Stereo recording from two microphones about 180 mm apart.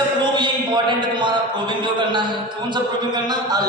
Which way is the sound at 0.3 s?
25° right (ahead or behind).